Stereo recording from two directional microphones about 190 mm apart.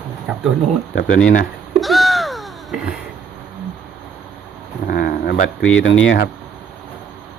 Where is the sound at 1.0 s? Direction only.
75° left (ahead or behind).